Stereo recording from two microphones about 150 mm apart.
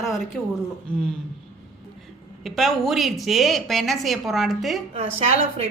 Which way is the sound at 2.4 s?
Centre (ahead or behind).